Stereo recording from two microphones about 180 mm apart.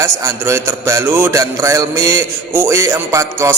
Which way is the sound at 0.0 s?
15° right (ahead or behind).